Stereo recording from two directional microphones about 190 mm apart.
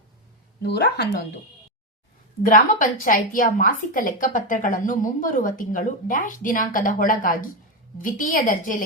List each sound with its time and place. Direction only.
0.6 s speech: 60° left (ahead or behind)
2.4 s a woman's voice: 45° left (ahead or behind)